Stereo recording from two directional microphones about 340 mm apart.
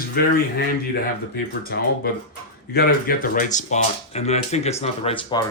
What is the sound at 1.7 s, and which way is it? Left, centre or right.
Speech, left.